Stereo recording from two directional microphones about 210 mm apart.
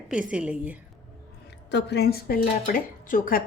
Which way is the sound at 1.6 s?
50° left (ahead or behind).